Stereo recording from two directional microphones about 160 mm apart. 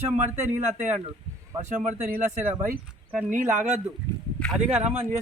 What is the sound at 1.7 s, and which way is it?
Speech, 50° right (ahead or behind).